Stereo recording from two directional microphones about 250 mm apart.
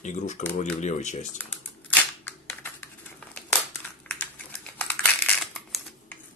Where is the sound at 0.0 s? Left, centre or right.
Left.